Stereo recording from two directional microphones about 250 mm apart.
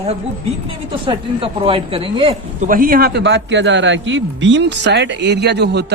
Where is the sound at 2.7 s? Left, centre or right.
Right.